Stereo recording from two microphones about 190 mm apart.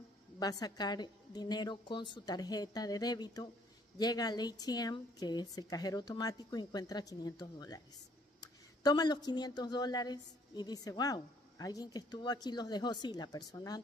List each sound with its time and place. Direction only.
0.4 s speech: 20° left (ahead or behind)